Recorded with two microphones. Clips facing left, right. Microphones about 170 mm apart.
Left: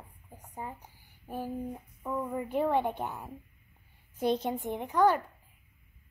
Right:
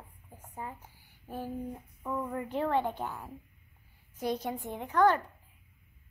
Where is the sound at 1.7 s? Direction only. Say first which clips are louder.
Left 1 dB; centre (ahead or behind).